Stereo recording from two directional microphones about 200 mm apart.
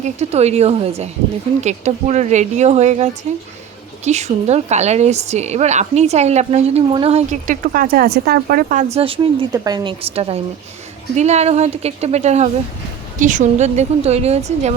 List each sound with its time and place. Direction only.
0.0 s a woman's voice: 35° right (ahead or behind)